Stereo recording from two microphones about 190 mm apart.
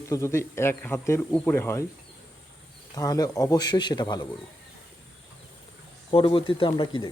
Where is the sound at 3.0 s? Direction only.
20° left (ahead or behind).